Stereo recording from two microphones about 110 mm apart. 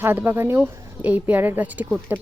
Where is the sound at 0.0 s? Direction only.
20° right (ahead or behind).